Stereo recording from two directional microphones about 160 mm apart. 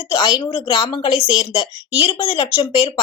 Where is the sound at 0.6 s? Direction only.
25° left (ahead or behind).